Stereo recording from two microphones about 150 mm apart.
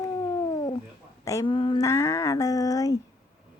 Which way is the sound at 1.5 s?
35° left (ahead or behind).